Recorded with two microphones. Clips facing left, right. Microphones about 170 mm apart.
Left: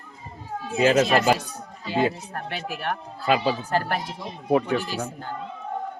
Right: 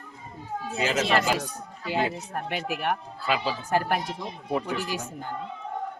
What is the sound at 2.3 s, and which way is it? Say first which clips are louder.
Speech: right 1 dB; 15° right (ahead or behind).